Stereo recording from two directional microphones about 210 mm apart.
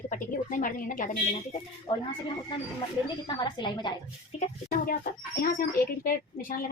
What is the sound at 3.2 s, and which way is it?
A woman's voice, 20° left (ahead or behind).